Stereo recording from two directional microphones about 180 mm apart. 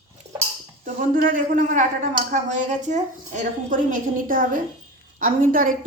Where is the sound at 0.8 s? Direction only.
45° right (ahead or behind).